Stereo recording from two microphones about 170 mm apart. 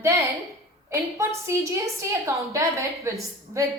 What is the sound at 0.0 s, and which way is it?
A woman's voice, 15° right (ahead or behind).